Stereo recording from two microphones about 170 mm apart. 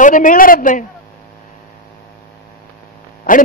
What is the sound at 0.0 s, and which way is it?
Speech, 50° left (ahead or behind).